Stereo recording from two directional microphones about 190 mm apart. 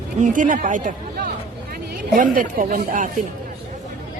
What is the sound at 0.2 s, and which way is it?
Speech, 45° right (ahead or behind).